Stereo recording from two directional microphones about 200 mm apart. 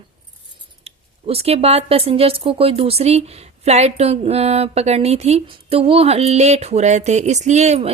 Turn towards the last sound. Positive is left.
turn(degrees=-30)  # may be behind; listen again after turning